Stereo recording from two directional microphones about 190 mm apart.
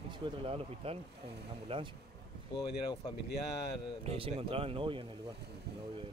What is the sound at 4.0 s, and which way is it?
Speech, 30° right (ahead or behind).